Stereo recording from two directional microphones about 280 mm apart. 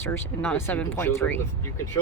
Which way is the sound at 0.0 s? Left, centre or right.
Centre.